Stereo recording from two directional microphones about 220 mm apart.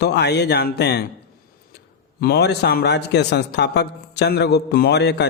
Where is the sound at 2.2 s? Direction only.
45° left (ahead or behind).